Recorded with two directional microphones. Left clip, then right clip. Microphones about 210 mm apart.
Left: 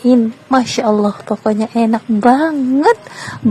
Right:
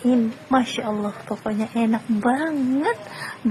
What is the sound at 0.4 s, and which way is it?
Speech, 25° left (ahead or behind).